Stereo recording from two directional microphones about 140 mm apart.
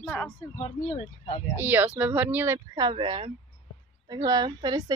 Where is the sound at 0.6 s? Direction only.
55° left (ahead or behind).